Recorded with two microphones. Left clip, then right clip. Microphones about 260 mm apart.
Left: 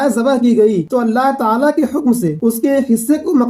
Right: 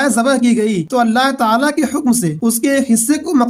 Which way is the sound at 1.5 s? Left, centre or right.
Right.